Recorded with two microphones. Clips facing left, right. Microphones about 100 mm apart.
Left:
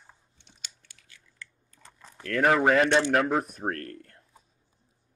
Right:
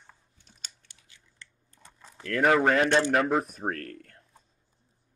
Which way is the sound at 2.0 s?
Centre (ahead or behind).